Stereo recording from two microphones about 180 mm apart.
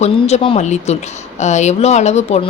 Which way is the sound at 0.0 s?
35° left (ahead or behind).